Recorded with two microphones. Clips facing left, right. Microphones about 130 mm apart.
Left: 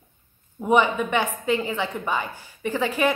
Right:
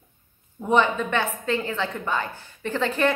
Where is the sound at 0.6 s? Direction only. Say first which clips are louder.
Left 1 dB; 10° left (ahead or behind).